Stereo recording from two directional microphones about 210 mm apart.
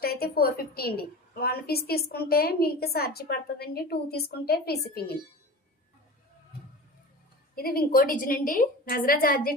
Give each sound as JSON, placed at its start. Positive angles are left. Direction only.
{"t": 0.0, "sound": "a woman's voice", "side_deg": 45}
{"t": 7.5, "sound": "a woman's voice", "side_deg": 45}